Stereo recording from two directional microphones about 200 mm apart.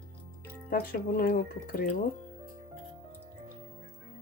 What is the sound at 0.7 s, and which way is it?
Speech, 45° left (ahead or behind).